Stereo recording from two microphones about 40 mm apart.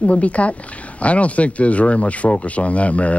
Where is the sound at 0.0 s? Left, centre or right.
Left.